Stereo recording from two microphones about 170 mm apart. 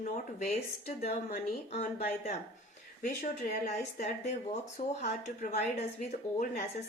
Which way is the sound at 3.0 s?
55° left (ahead or behind).